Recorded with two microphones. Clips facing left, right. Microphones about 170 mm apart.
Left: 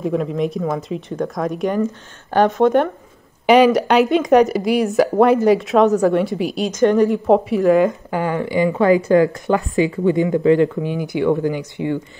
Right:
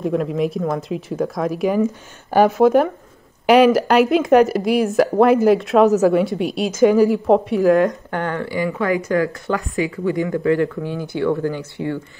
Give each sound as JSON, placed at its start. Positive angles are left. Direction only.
{"t": 0.0, "sound": "speech", "side_deg": 0}